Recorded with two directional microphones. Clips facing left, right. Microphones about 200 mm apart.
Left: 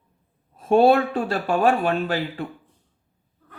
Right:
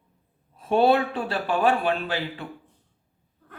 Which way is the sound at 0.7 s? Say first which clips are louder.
Left 4 dB; 45° left (ahead or behind).